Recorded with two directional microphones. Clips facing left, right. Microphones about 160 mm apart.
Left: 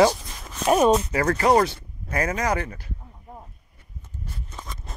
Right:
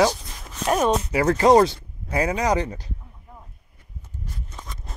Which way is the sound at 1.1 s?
15° right (ahead or behind).